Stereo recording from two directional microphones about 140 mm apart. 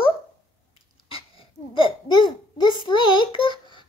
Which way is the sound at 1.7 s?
35° left (ahead or behind).